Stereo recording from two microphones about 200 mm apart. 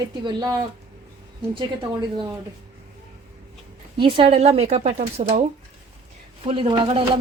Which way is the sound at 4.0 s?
25° right (ahead or behind).